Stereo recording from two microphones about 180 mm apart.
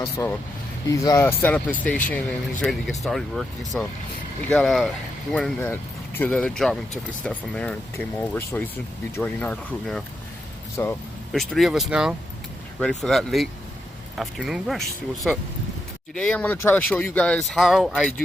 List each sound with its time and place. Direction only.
0.2 s speech: 15° left (ahead or behind); by 18.1 s centre (ahead or behind)